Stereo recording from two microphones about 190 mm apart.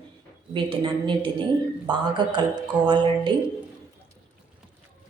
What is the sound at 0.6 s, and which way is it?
A woman's voice, 25° right (ahead or behind).